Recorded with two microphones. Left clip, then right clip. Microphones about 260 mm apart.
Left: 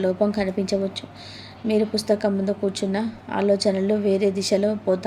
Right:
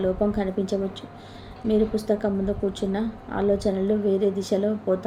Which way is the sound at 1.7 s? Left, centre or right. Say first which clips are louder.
Left 2 dB; centre.